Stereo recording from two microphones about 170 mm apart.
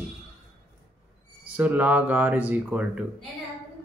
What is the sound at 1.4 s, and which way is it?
Speech, 10° right (ahead or behind).